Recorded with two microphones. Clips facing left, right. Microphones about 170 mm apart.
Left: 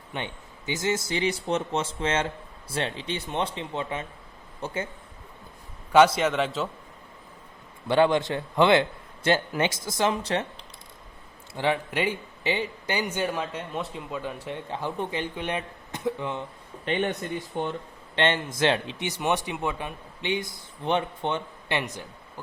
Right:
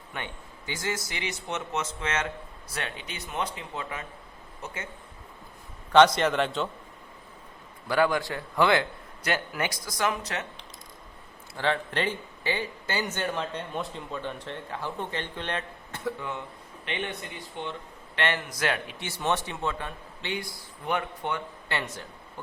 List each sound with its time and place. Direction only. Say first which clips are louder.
0.1 s speech: left 4 dB; 20° left (ahead or behind)
5.9 s a man's voice: left 1 dB; 5° left (ahead or behind)
7.9 s speech: left 4 dB; 25° left (ahead or behind)
11.5 s speech: left 2 dB; 15° left (ahead or behind)
16.8 s speech: left 7 dB; 40° left (ahead or behind)
18.2 s speech: left 5 dB; 25° left (ahead or behind)